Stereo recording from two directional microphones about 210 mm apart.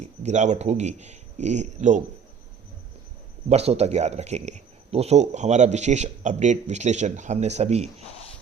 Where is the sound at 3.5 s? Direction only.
30° right (ahead or behind).